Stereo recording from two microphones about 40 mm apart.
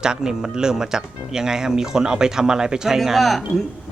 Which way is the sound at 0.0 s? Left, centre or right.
Centre.